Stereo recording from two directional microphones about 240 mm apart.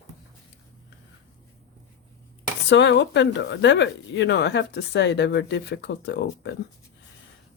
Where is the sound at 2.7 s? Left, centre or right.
Left.